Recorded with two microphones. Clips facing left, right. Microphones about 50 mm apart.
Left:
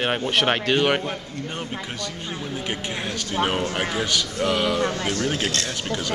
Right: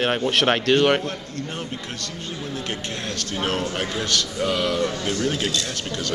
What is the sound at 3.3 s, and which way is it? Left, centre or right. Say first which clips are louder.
A man's voice: left 2 dB; centre.